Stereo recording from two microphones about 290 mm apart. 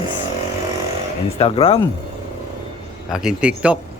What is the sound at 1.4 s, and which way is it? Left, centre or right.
Speech, centre.